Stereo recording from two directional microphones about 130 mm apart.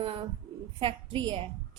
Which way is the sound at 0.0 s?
45° right (ahead or behind).